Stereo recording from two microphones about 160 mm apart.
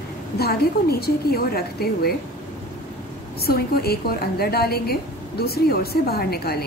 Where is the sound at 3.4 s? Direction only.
75° left (ahead or behind).